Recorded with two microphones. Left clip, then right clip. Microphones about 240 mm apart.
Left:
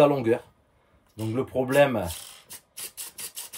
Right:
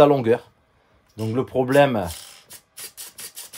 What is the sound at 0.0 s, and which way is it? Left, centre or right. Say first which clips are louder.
Speech: right 5 dB; right.